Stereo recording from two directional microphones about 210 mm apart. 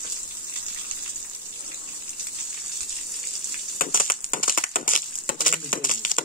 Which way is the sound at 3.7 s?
40° left (ahead or behind).